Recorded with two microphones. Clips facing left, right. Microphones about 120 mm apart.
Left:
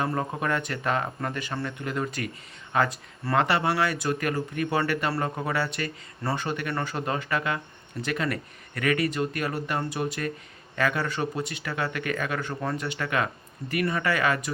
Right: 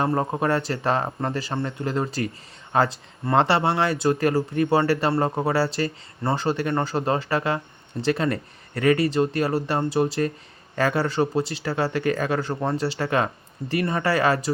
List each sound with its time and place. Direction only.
0.0 s speech: 30° right (ahead or behind)